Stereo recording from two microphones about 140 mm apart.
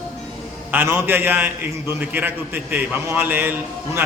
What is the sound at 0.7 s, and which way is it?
A man's voice, 15° right (ahead or behind).